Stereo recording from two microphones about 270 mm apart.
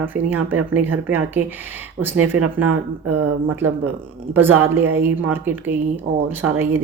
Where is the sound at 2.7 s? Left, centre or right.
Right.